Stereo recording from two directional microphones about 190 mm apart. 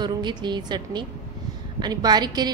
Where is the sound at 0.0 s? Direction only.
20° right (ahead or behind).